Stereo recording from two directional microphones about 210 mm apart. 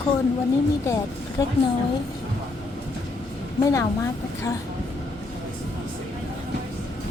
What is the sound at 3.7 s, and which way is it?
Speech, 15° left (ahead or behind).